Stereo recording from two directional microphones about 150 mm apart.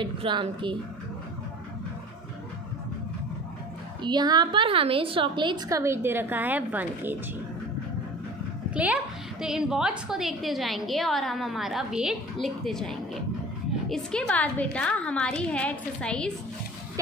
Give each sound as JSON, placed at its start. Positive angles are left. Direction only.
{"t": 0.0, "sound": "a woman's voice", "side_deg": -35}
{"t": 4.0, "sound": "a woman's voice", "side_deg": -30}
{"t": 8.7, "sound": "a woman's voice", "side_deg": -10}